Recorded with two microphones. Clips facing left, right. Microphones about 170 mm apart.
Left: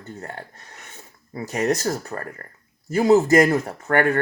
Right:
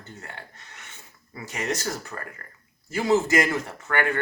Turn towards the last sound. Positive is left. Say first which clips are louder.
# left 6 dB
turn(degrees=40)  # may be behind; listen again after turning